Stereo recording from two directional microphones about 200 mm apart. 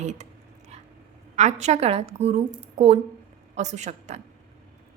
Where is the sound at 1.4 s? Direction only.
35° right (ahead or behind).